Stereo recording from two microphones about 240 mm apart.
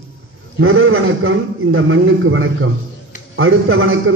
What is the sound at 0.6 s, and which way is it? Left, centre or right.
A man's voice, right.